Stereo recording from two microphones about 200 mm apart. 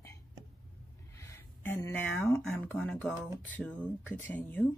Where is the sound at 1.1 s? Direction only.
15° left (ahead or behind).